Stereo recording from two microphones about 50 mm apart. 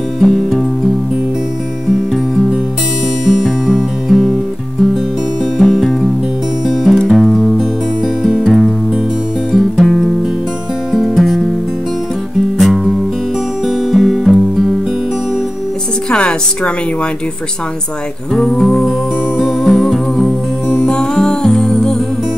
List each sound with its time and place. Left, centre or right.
0.2 s music: centre
3.3 s music: centre
6.6 s music: centre
7.2 s music: centre
12.5 s music: centre
16.1 s music: centre
18.3 s music: centre
20.8 s music: centre